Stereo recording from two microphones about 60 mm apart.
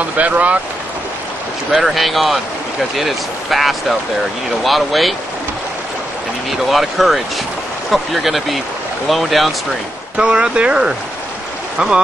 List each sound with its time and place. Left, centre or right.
0.2 s speech: right
1.7 s speech: centre
6.7 s speech: centre
10.1 s speech: centre